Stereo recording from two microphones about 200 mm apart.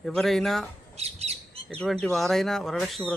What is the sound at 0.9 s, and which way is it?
Bird, 30° right (ahead or behind).